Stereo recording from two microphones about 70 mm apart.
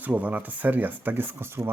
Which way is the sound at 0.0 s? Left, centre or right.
Right.